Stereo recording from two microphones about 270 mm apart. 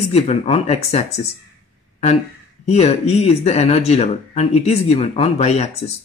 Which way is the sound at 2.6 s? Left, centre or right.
Left.